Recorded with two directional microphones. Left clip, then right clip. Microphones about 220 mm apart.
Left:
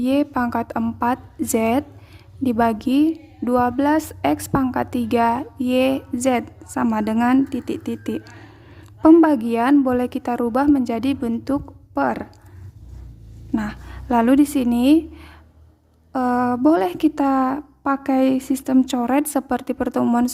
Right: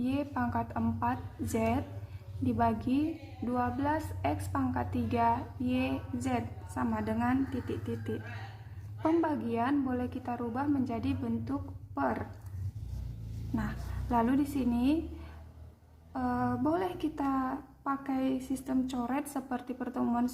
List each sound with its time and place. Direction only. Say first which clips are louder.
0.0 s a woman's voice: left 13 dB; 50° left (ahead or behind)
13.6 s a woman's voice: left 10 dB; 45° left (ahead or behind)